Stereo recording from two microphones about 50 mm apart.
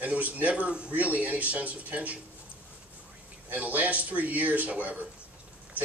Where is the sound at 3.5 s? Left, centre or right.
Right.